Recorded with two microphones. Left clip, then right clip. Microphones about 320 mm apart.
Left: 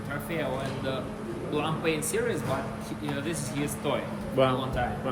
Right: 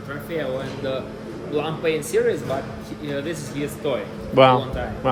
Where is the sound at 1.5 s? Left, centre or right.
Centre.